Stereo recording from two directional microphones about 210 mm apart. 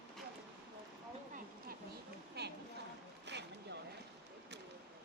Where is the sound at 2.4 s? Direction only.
50° right (ahead or behind).